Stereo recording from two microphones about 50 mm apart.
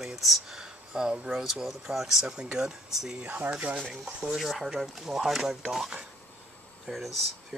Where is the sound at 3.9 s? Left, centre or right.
Centre.